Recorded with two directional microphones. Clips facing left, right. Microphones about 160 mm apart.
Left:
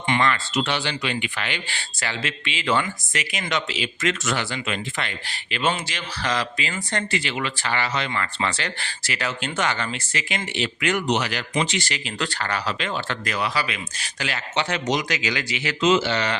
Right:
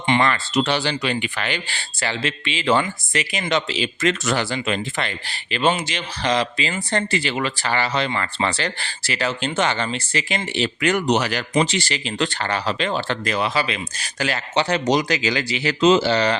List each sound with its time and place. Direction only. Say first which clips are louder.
0.1 s speech: right 3 dB; 35° right (ahead or behind)
5.7 s speech: right 4 dB; 20° right (ahead or behind)